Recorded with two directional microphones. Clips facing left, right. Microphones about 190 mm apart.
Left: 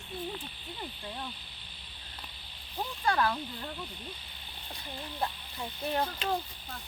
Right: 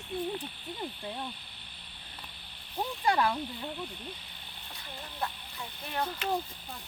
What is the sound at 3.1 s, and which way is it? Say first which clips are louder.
Speech: right 1 dB; 15° right (ahead or behind).